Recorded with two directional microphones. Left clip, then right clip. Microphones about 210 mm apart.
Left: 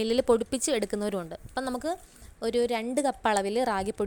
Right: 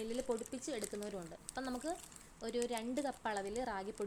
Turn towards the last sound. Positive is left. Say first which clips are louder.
# left 13 dB
turn(degrees=35)  # may be behind; listen again after turning